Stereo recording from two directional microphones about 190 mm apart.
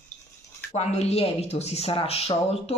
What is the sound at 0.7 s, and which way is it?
Speech, 35° left (ahead or behind).